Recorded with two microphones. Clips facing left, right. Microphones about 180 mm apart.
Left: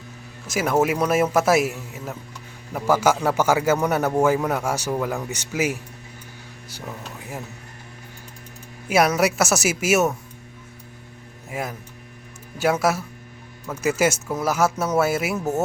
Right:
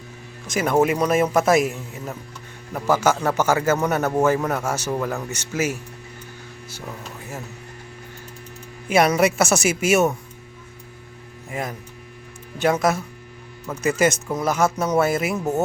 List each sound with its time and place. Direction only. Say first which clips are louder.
0.4 s a man's voice: right 2 dB; 5° left (ahead or behind)
8.9 s a man's voice: right 1 dB; centre (ahead or behind)
11.4 s a man's voice: right 1 dB; 5° left (ahead or behind)